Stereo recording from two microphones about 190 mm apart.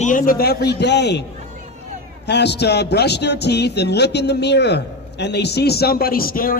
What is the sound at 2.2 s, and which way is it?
A man's voice, 60° left (ahead or behind).